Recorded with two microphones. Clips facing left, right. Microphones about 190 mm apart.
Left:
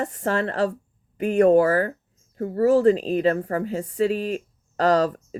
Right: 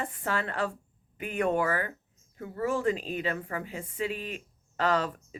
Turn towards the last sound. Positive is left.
turn(degrees=40)  # may be behind; listen again after turning